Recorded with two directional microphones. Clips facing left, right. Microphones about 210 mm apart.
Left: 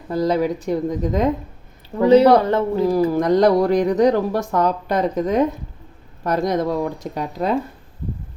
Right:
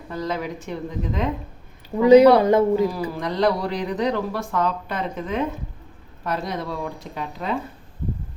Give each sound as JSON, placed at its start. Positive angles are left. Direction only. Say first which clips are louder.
{"t": 0.1, "sound": "speech", "louder": "left 8 dB", "side_deg": 35}
{"t": 2.4, "sound": "speech", "louder": "right 2 dB", "side_deg": -10}
{"t": 2.8, "sound": "speech", "louder": "left 7 dB", "side_deg": 45}